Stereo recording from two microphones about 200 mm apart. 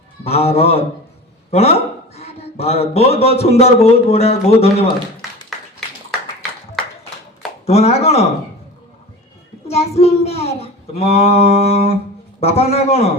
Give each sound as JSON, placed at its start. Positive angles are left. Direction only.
{"t": 0.3, "sound": "a man's voice", "side_deg": 30}
{"t": 5.5, "sound": "a sound", "side_deg": 0}
{"t": 7.7, "sound": "speech", "side_deg": 30}
{"t": 9.6, "sound": "speech", "side_deg": 30}